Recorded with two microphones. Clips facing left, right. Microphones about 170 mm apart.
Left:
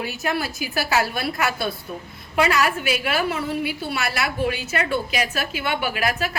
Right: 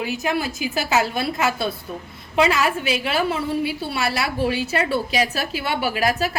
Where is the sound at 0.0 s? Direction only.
15° right (ahead or behind).